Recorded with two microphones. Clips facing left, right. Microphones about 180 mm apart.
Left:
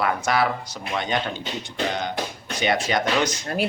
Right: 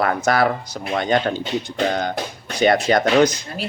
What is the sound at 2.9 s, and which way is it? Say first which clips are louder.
Speech: right 6 dB; 40° right (ahead or behind).